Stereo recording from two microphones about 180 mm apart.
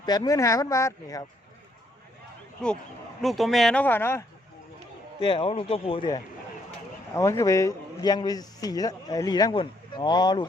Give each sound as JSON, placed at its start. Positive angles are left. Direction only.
{"t": 0.0, "sound": "a man's voice", "side_deg": 20}
{"t": 2.6, "sound": "speech", "side_deg": 5}
{"t": 5.2, "sound": "a man's voice", "side_deg": 30}